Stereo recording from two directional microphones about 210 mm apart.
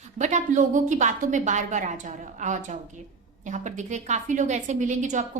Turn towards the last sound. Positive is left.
turn(degrees=-35)  # may be behind; listen again after turning